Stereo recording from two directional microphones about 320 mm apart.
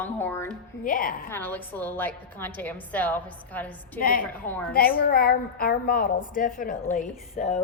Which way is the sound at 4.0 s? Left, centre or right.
Left.